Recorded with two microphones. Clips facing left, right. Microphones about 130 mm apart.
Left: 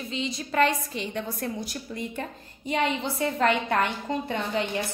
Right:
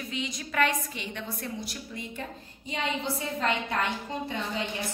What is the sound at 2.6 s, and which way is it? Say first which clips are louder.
A woman's voice: left 5 dB; 60° left (ahead or behind).